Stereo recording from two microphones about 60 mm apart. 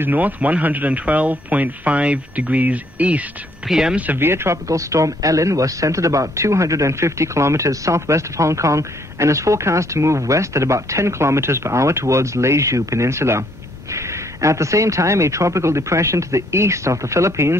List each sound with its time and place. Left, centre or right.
0.0 s speech: right
3.6 s speech: centre
3.9 s speech: right
4.2 s speech: right
4.6 s speech: right